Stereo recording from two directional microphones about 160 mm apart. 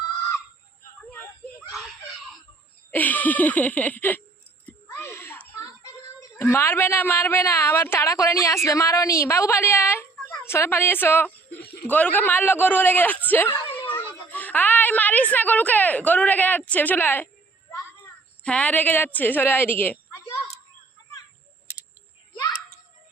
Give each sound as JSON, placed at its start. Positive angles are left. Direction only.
{"t": 1.1, "sound": "a sound", "side_deg": 15}
{"t": 1.7, "sound": "screaming", "side_deg": 0}
{"t": 2.9, "sound": "a man's voice", "side_deg": 10}
{"t": 4.6, "sound": "a sound", "side_deg": 15}
{"t": 6.4, "sound": "a man's voice", "side_deg": 15}
{"t": 18.4, "sound": "a woman's voice", "side_deg": 10}